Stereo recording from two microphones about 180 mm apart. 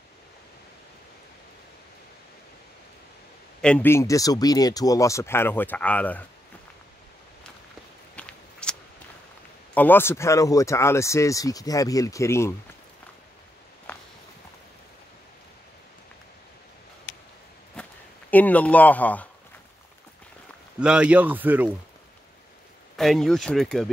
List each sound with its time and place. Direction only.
3.6 s speech: 10° left (ahead or behind)
8.2 s a sound: 5° left (ahead or behind)
9.8 s speech: 10° left (ahead or behind)
17.8 s a sound: 5° left (ahead or behind)
18.3 s speech: 10° left (ahead or behind)
20.8 s speech: 5° right (ahead or behind)
22.9 s speech: centre (ahead or behind)